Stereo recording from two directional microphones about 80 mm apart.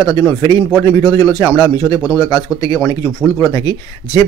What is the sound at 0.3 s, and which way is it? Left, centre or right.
Speech, left.